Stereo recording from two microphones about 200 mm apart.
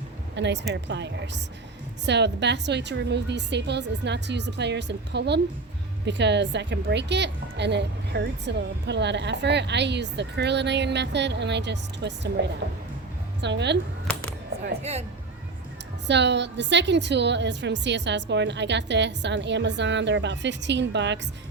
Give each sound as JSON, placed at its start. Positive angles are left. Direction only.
{"t": 0.3, "sound": "a woman's voice", "side_deg": -60}
{"t": 14.8, "sound": "speech", "side_deg": -30}
{"t": 16.0, "sound": "a woman's voice", "side_deg": -60}